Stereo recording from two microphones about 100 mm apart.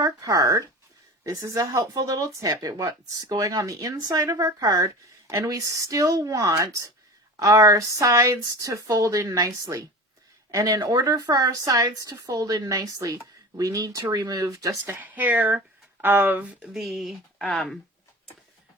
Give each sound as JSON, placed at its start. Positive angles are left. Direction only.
{"t": 0.0, "sound": "speech", "side_deg": -35}
{"t": 14.8, "sound": "speech", "side_deg": -20}